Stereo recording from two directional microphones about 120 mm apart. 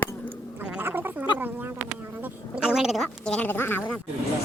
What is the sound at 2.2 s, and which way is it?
A woman's voice, 10° right (ahead or behind).